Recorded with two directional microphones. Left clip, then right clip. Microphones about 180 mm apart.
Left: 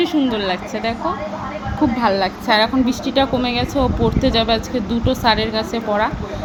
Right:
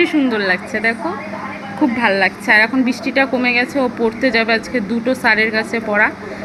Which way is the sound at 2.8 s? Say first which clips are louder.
Right 1 dB; 30° right (ahead or behind).